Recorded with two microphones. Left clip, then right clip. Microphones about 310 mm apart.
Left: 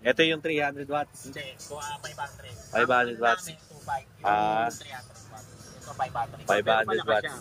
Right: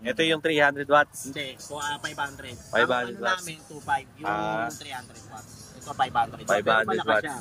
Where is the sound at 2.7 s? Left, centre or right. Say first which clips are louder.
Even; centre.